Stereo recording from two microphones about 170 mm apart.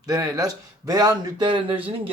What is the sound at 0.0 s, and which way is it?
A man's voice, 20° right (ahead or behind).